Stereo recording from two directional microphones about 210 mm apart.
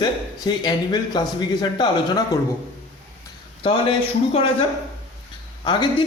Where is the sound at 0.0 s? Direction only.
20° left (ahead or behind).